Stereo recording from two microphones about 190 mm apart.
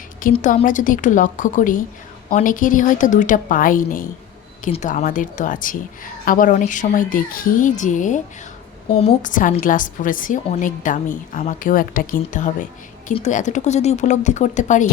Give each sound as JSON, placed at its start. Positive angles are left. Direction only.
{"t": 0.2, "sound": "a woman's voice", "side_deg": 45}
{"t": 9.2, "sound": "a woman's voice", "side_deg": 45}